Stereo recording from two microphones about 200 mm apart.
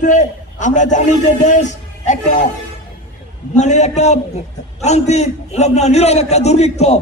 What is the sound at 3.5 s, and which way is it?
A man's voice, 35° left (ahead or behind).